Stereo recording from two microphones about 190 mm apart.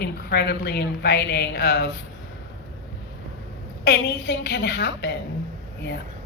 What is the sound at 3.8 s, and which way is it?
Speech, 60° left (ahead or behind).